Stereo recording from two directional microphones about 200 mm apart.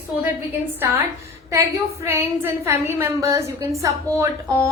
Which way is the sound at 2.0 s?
10° right (ahead or behind).